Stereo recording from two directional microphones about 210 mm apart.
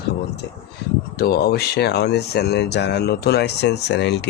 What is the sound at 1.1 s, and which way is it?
Speech, 50° left (ahead or behind).